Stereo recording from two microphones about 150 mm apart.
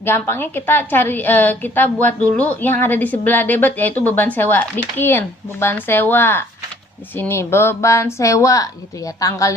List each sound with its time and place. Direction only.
0.0 s a woman's voice: 15° left (ahead or behind)